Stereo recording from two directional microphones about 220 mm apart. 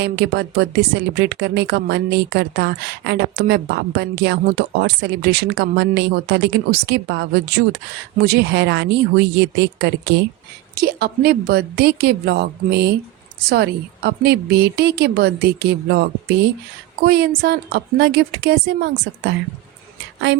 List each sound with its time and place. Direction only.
0.0 s speech: 50° right (ahead or behind)